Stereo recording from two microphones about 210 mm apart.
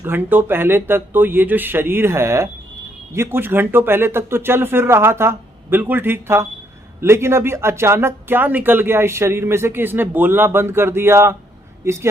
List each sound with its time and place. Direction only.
0.0 s speech: 10° right (ahead or behind)